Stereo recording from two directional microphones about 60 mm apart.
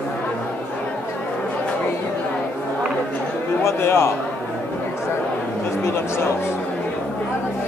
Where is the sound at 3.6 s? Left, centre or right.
Left.